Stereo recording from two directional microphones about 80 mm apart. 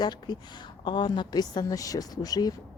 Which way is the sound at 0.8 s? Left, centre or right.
Left.